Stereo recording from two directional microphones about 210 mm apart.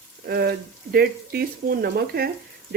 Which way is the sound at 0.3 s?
45° right (ahead or behind).